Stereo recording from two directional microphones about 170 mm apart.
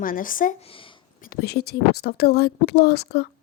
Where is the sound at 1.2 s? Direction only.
65° left (ahead or behind).